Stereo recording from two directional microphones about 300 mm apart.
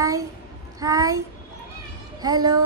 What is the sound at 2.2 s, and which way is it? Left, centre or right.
Speech, centre.